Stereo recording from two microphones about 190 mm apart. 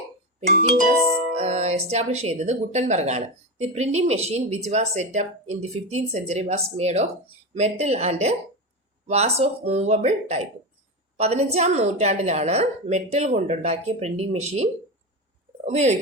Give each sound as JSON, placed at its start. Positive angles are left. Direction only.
{"t": 1.3, "sound": "speech", "side_deg": -35}